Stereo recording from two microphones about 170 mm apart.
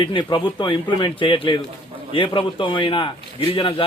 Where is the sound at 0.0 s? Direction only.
30° left (ahead or behind).